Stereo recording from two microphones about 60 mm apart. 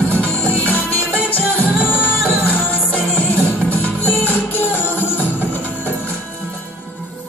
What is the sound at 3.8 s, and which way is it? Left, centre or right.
Music, left.